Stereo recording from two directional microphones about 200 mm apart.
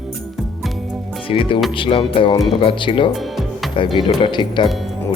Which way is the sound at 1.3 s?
25° left (ahead or behind).